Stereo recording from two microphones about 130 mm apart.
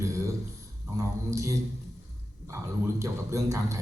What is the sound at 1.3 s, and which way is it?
A man's voice, 25° right (ahead or behind).